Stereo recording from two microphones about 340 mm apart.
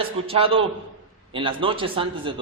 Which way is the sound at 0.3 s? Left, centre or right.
Centre.